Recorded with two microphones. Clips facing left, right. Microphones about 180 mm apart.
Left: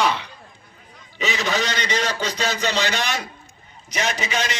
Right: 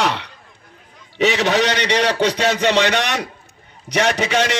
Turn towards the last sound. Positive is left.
turn(degrees=-70)  # may be behind; listen again after turning